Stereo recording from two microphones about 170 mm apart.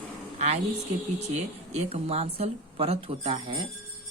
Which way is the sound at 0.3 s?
40° right (ahead or behind).